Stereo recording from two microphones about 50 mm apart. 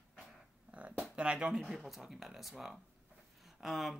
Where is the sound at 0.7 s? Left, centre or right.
Right.